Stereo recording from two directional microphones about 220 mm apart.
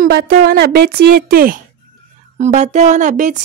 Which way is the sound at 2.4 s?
30° right (ahead or behind).